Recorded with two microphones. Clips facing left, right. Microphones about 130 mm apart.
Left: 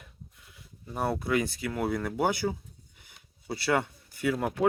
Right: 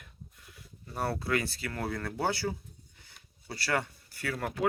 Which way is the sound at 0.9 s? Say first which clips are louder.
Left 3 dB; 20° left (ahead or behind).